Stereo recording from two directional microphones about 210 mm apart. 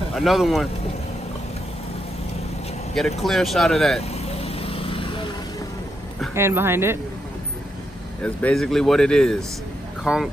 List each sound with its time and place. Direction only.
0.1 s a man's voice: centre (ahead or behind)
3.2 s a man's voice: centre (ahead or behind)
4.1 s vehicle: 30° left (ahead or behind)
6.3 s speech: 10° right (ahead or behind)
8.2 s a man's voice: 5° left (ahead or behind)